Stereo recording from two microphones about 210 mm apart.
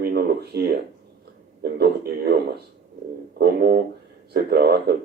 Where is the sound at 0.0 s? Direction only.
45° right (ahead or behind).